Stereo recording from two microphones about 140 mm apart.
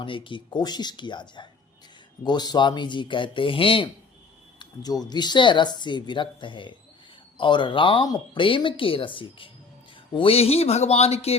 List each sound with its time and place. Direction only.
0.0 s speech: 35° left (ahead or behind)
4.6 s speech: 30° left (ahead or behind); by 11.3 s 50° left (ahead or behind)